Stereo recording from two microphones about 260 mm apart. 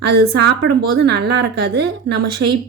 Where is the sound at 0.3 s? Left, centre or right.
Right.